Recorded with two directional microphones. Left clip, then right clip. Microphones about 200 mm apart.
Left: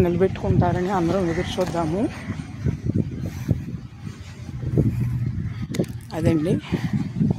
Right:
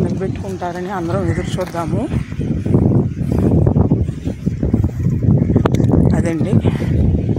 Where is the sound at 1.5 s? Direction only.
20° right (ahead or behind).